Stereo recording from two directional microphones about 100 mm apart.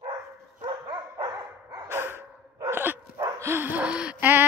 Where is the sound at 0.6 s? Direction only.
45° right (ahead or behind).